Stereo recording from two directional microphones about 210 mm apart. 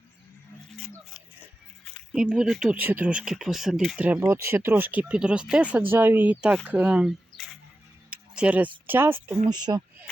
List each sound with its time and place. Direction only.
1.8 s speech: 5° left (ahead or behind)
6.7 s a sound: 5° right (ahead or behind)
8.9 s speech: 10° right (ahead or behind)